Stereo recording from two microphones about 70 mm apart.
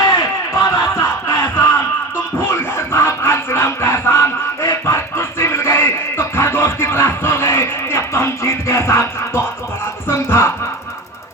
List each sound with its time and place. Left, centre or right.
0.6 s music: left